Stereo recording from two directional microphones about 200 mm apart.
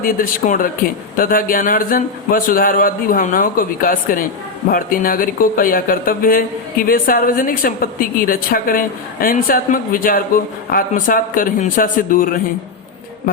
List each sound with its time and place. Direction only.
0.0 s speech: 45° left (ahead or behind)